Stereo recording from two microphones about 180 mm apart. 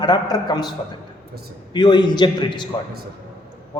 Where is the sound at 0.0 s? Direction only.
25° left (ahead or behind).